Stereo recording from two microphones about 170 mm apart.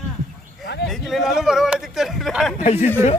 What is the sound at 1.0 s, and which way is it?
Speech, centre (ahead or behind).